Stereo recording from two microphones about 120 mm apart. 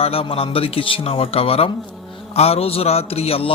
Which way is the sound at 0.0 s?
50° left (ahead or behind).